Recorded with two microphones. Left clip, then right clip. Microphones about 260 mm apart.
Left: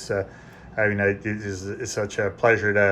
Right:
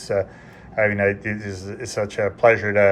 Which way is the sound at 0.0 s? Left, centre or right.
Centre.